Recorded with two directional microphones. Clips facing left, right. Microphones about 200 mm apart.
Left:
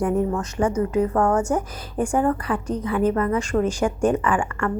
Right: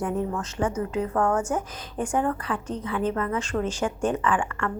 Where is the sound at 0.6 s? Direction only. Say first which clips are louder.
Left 5 dB; 70° left (ahead or behind).